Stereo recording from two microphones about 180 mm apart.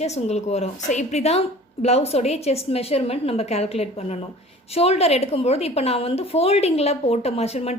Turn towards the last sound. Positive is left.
turn(degrees=35)  # may be behind; listen again after turning